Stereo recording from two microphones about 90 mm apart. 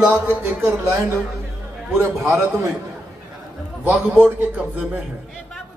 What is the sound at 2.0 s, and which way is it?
Speech, 25° right (ahead or behind).